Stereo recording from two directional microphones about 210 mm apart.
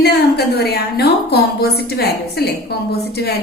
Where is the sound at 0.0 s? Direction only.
50° left (ahead or behind).